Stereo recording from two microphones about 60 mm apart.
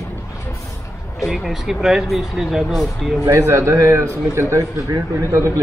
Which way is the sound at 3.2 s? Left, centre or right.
Right.